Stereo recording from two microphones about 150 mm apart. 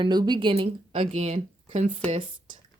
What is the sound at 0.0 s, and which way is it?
Speech, 30° right (ahead or behind).